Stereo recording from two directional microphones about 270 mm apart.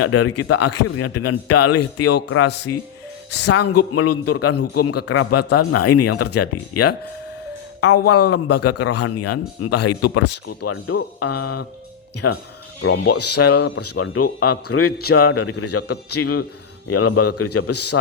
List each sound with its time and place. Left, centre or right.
0.0 s a man's voice: left
8.0 s a man's voice: left